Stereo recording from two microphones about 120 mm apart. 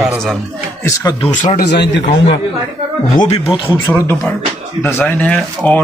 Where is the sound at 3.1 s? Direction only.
90° left.